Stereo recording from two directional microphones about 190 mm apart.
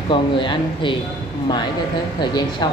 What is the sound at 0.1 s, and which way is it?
Speech, 25° left (ahead or behind).